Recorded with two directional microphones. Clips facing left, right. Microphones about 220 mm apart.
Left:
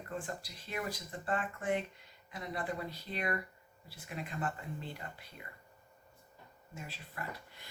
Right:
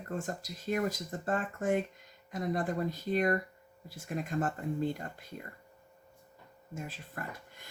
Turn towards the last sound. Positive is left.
turn(degrees=-45)  # may be behind; listen again after turning